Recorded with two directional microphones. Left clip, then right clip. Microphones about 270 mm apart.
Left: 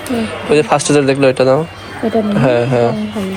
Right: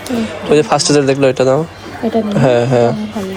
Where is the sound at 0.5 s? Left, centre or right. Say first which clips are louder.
Even; centre.